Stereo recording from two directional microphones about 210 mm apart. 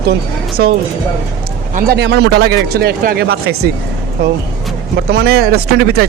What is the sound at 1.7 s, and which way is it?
Speech, 50° right (ahead or behind).